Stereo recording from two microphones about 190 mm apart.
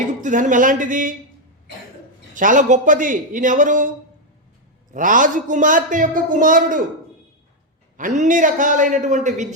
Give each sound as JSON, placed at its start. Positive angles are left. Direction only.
{"t": 0.2, "sound": "a man's voice", "side_deg": -40}
{"t": 2.3, "sound": "a man's voice", "side_deg": -45}
{"t": 4.9, "sound": "a man's voice", "side_deg": -45}
{"t": 7.9, "sound": "a man's voice", "side_deg": -40}